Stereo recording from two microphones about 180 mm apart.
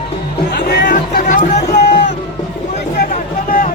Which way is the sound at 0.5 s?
70° left (ahead or behind).